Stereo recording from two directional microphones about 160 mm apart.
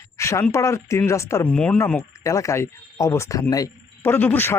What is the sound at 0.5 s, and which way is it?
Speech, 20° left (ahead or behind).